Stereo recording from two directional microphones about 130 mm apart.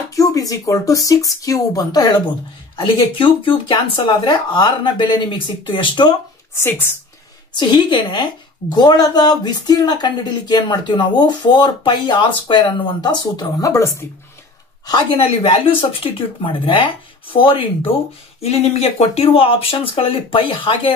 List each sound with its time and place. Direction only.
0.1 s a woman's voice: 25° left (ahead or behind)
6.5 s speech: 20° left (ahead or behind)
7.5 s a woman's voice: 35° left (ahead or behind)
14.9 s a woman's voice: 40° left (ahead or behind)
18.4 s speech: 50° left (ahead or behind)